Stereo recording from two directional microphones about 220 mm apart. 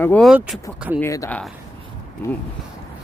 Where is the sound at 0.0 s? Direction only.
5° left (ahead or behind).